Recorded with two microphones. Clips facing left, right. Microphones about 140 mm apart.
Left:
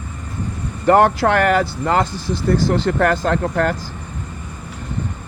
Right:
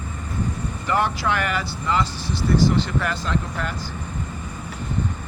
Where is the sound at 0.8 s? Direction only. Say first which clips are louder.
Left 10 dB; 75° left (ahead or behind).